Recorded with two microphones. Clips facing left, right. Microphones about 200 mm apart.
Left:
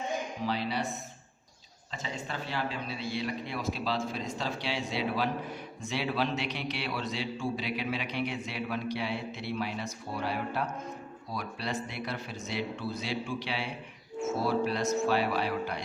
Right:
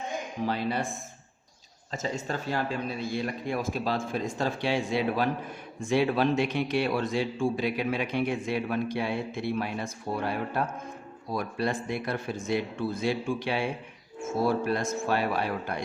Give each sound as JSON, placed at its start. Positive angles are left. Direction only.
{"t": 0.4, "sound": "a man's voice", "side_deg": -50}